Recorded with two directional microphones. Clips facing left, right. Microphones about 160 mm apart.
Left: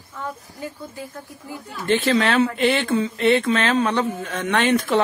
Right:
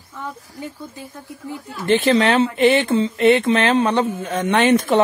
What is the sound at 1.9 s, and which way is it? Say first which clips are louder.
Speech: right 3 dB; 20° right (ahead or behind).